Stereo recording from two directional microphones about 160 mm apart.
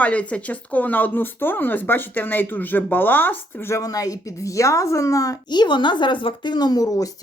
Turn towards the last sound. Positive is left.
turn(degrees=20)  # may be behind; listen again after turning